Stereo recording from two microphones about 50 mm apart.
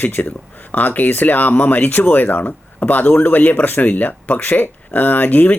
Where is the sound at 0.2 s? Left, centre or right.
Left.